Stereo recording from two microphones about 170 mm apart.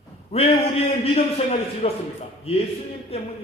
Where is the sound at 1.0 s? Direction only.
35° left (ahead or behind).